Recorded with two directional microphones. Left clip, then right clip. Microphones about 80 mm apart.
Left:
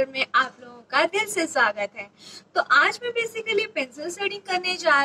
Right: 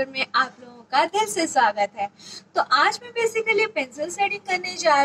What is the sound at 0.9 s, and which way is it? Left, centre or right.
Speech, left.